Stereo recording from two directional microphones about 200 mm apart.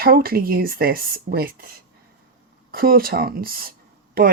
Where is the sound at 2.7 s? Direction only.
45° right (ahead or behind).